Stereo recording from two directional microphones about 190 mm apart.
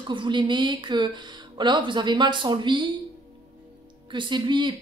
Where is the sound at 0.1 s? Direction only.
25° right (ahead or behind).